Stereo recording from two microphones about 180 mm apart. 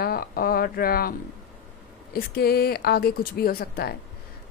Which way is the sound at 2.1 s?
60° left (ahead or behind).